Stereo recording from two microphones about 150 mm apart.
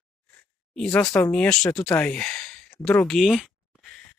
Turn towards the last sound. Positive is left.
turn(degrees=0)  # may be behind; listen again after turning